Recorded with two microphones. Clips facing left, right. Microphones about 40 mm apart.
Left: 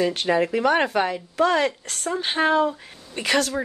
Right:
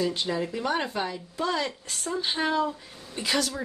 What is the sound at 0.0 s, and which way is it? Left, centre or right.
A woman's voice, left.